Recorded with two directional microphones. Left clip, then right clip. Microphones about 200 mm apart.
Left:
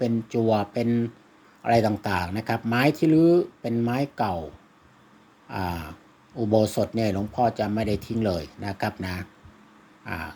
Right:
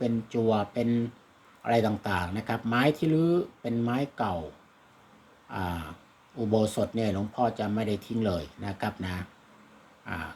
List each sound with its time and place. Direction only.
0.0 s speech: 25° left (ahead or behind)
5.5 s speech: 25° left (ahead or behind)